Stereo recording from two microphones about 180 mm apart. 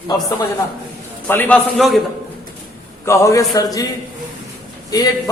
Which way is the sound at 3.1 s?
15° left (ahead or behind).